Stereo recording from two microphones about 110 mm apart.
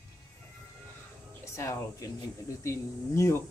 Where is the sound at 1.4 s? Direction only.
25° left (ahead or behind).